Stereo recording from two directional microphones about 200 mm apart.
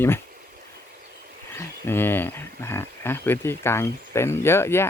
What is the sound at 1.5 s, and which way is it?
Speech, 10° left (ahead or behind).